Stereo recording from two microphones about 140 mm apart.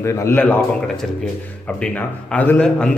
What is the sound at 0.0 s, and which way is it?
Speech, 20° left (ahead or behind).